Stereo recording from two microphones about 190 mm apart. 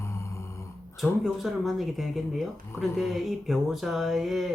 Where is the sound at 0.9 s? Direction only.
Centre (ahead or behind).